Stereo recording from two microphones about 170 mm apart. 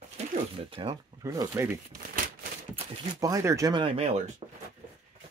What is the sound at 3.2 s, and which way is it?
Speech, 20° right (ahead or behind).